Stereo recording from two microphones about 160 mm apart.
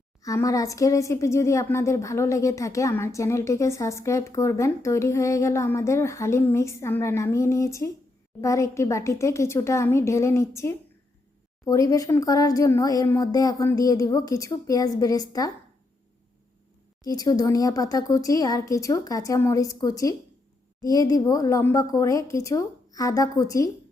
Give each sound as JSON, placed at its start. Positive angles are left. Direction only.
{"t": 0.2, "sound": "a woman's voice", "side_deg": 20}
{"t": 17.0, "sound": "speech", "side_deg": 25}